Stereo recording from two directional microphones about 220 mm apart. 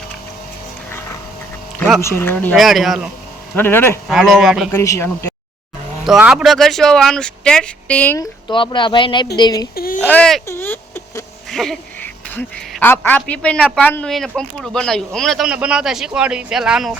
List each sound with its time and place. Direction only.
1.8 s speech: 10° left (ahead or behind)
3.5 s speech: 10° left (ahead or behind)
4.1 s speech: centre (ahead or behind)
4.7 s speech: 10° left (ahead or behind)
6.1 s speech: 5° right (ahead or behind); by 9.6 s 15° left (ahead or behind)
9.7 s speech: 40° left (ahead or behind)
10.0 s speech: 5° left (ahead or behind)
10.4 s a sound: 10° left (ahead or behind)
11.5 s speech: centre (ahead or behind)